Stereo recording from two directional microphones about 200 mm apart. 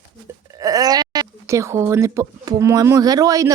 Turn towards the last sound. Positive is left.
turn(degrees=-15)  # may be behind; listen again after turning